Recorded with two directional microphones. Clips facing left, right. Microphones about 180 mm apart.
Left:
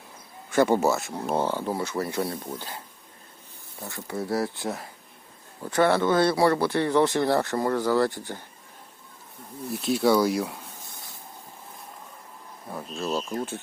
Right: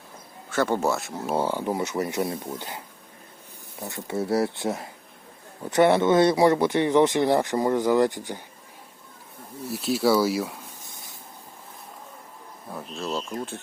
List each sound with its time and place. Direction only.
0.5 s speech: 10° left (ahead or behind); by 8.4 s 15° right (ahead or behind)
9.7 s speech: centre (ahead or behind)
12.6 s speech: centre (ahead or behind)